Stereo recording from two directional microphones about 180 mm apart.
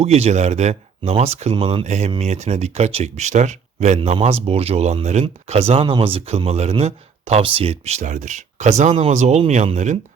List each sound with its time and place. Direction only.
0.0 s speech: 35° right (ahead or behind)